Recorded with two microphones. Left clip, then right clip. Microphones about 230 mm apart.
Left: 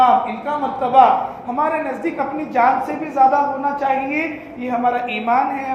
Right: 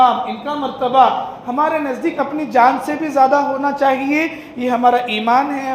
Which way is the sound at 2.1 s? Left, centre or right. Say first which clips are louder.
Right 4 dB; right.